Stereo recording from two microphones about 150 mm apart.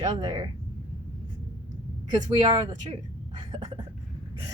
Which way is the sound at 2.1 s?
30° right (ahead or behind).